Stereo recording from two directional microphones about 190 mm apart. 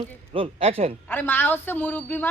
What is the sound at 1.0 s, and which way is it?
Speech, 10° left (ahead or behind).